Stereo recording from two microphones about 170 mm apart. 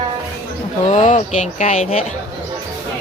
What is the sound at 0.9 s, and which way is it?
Speech, 45° left (ahead or behind).